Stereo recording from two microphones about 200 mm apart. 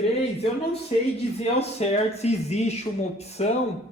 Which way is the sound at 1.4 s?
30° left (ahead or behind).